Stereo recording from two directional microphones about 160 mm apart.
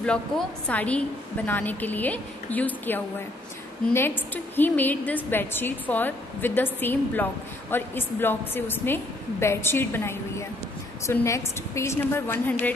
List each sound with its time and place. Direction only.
0.0 s a woman's voice: 5° left (ahead or behind)